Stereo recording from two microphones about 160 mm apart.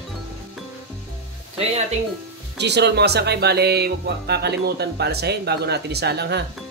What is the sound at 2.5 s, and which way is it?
Speech, 90° right.